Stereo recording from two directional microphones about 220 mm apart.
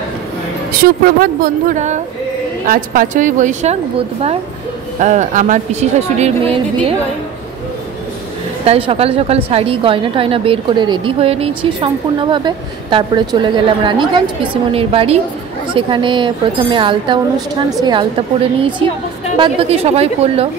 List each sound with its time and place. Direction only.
0.7 s speech: 45° right (ahead or behind)
5.0 s speech: 35° right (ahead or behind)
8.6 s a woman's voice: 25° right (ahead or behind)